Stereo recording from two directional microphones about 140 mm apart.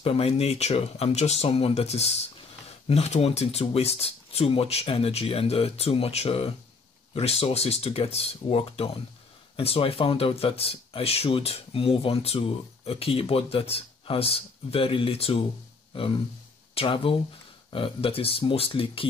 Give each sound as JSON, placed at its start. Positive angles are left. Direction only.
{"t": 0.0, "sound": "speech", "side_deg": 45}
{"t": 16.7, "sound": "speech", "side_deg": 40}